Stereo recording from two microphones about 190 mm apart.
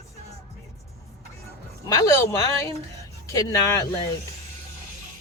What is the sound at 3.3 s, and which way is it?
Speech, 15° left (ahead or behind).